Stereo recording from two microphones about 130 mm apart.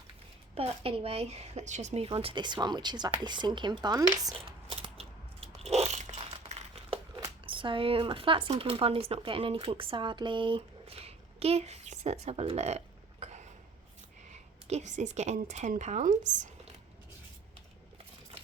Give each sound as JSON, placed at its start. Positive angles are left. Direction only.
{"t": 0.5, "sound": "speech", "side_deg": -50}
{"t": 4.4, "sound": "biting", "side_deg": -45}
{"t": 7.4, "sound": "speech", "side_deg": -40}
{"t": 14.7, "sound": "a woman's voice", "side_deg": -60}